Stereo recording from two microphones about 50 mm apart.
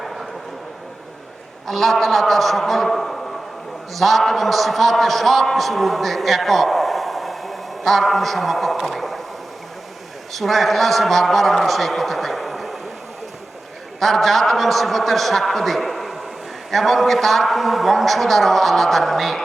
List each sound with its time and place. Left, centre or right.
1.6 s a man's voice: centre
10.3 s a man's voice: centre
14.0 s a man's voice: centre